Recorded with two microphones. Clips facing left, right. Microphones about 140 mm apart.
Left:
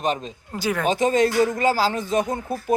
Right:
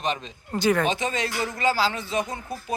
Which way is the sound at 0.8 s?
45° left (ahead or behind).